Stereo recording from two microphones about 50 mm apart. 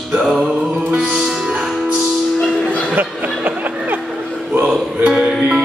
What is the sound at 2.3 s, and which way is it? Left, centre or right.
Music, left.